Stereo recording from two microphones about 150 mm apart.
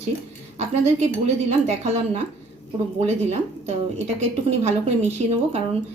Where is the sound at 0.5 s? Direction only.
45° right (ahead or behind).